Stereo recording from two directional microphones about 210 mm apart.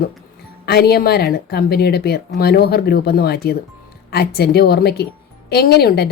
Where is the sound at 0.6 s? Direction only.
50° left (ahead or behind).